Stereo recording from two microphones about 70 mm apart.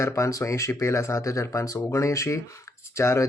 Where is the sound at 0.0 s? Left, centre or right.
Left.